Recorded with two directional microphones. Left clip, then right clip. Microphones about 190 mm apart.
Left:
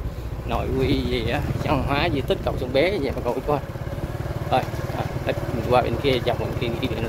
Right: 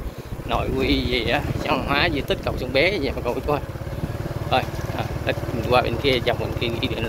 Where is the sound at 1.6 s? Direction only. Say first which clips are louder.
Right 1 dB; 15° left (ahead or behind).